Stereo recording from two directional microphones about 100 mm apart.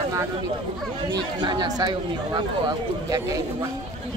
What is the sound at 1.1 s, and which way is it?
Speech, 45° right (ahead or behind).